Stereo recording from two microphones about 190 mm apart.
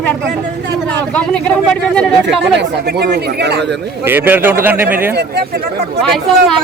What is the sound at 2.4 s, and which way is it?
Speech, 60° right (ahead or behind).